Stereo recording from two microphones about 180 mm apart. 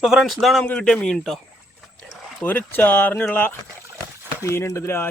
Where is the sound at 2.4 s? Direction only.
10° left (ahead or behind).